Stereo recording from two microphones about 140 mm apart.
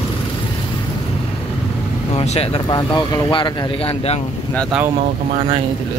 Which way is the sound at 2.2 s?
45° left (ahead or behind).